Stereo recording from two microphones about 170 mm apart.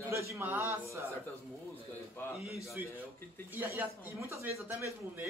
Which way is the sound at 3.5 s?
10° right (ahead or behind).